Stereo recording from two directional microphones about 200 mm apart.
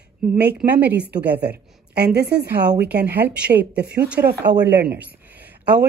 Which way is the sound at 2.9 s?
10° right (ahead or behind).